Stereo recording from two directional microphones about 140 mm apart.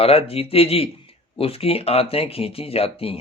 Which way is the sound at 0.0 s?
45° left (ahead or behind).